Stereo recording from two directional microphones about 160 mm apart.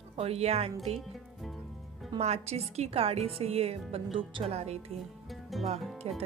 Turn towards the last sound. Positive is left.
turn(degrees=-40)  # may be behind; listen again after turning